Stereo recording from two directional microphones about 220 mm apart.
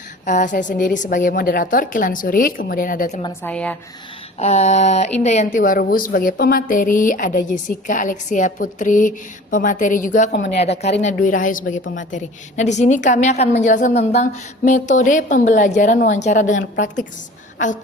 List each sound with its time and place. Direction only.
0.3 s speech: 35° left (ahead or behind)
3.4 s speech: 5° left (ahead or behind)
4.4 s speech: 30° left (ahead or behind)
10.3 s a woman's voice: 50° left (ahead or behind)
10.6 s speech: 30° left (ahead or behind)